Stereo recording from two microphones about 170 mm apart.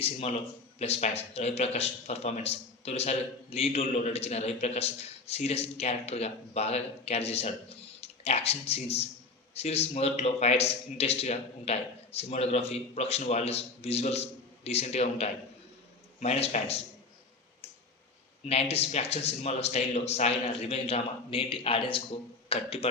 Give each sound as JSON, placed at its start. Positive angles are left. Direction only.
{"t": 0.0, "sound": "speech", "side_deg": 35}
{"t": 18.4, "sound": "speech", "side_deg": 35}